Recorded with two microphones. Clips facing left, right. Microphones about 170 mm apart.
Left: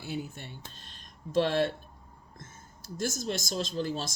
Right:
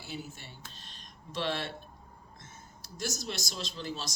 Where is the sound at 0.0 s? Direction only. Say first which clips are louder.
Left 5 dB; 55° left (ahead or behind).